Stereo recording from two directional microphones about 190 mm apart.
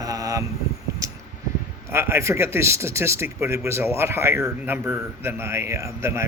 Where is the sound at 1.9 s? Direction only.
15° right (ahead or behind).